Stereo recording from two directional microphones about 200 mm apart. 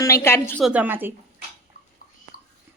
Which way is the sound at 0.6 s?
5° right (ahead or behind).